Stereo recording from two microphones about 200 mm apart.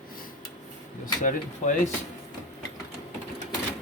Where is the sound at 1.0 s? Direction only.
40° left (ahead or behind).